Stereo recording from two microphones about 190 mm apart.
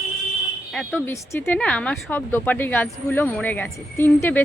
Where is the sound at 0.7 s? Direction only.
5° left (ahead or behind).